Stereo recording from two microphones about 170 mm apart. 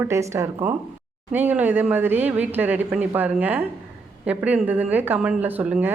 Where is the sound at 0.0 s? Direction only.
15° right (ahead or behind).